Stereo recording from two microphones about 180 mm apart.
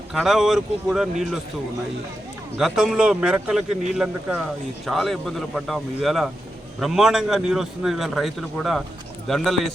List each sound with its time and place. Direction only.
0.1 s a man's voice: centre (ahead or behind)
2.6 s a man's voice: 5° right (ahead or behind)